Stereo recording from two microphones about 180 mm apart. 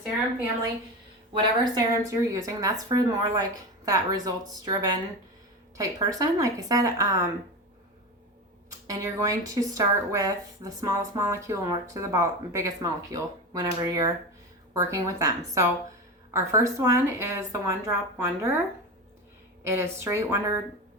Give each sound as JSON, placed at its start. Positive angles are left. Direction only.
{"t": 1.3, "sound": "speech", "side_deg": -25}
{"t": 8.9, "sound": "a woman's voice", "side_deg": -20}
{"t": 19.6, "sound": "a woman's voice", "side_deg": -15}